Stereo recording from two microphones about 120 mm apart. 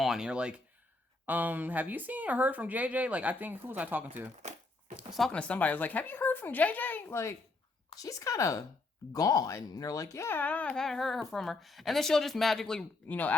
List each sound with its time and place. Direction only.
0.0 s speech: 5° right (ahead or behind)
4.9 s speech: centre (ahead or behind)
5.3 s speech: 10° left (ahead or behind)